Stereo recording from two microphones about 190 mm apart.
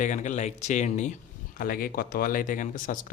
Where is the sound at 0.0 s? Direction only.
40° left (ahead or behind).